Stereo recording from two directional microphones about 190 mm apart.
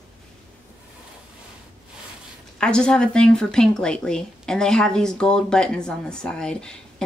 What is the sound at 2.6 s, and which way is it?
A woman's voice, 5° left (ahead or behind).